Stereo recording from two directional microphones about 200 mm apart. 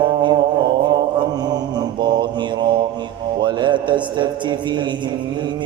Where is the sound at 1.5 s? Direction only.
20° right (ahead or behind).